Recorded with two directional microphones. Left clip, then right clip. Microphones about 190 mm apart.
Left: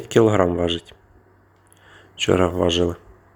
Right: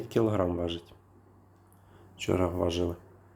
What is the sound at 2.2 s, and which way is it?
Speech, 25° left (ahead or behind).